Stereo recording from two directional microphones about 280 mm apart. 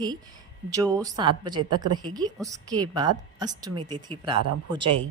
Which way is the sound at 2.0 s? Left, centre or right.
Centre.